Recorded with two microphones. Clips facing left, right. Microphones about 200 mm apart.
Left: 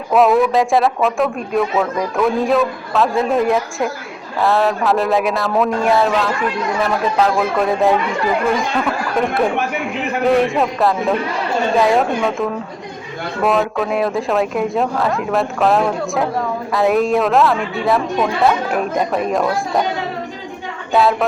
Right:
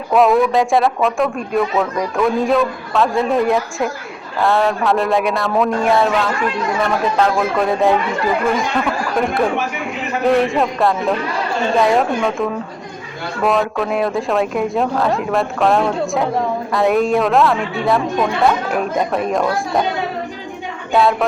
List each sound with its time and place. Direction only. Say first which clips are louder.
0.1 s a man's voice: even; centre (ahead or behind)
20.9 s speech: even; centre (ahead or behind)